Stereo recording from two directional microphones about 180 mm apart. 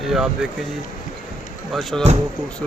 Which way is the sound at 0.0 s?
Centre (ahead or behind).